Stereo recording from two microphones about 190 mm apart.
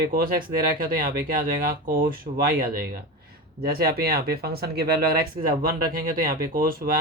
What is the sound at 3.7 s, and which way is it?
Speech, 55° right (ahead or behind).